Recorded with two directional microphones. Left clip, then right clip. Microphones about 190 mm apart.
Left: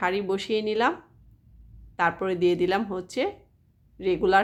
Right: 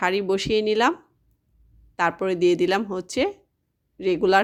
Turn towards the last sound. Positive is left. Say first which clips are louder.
# right 3 dB
turn(degrees=-30)  # may be behind; listen again after turning